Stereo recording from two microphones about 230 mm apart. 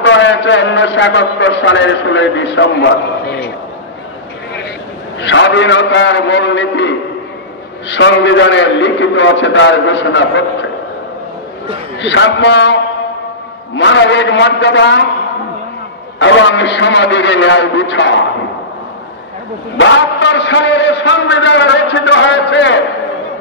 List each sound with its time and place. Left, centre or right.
0.0 s a man's voice: left
5.2 s a man's voice: left
12.0 s a man's voice: left
13.7 s a man's voice: left
16.2 s a man's voice: left
19.8 s a man's voice: left